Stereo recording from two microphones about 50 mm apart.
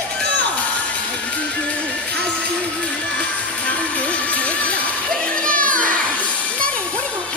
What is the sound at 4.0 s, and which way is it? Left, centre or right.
Music, left.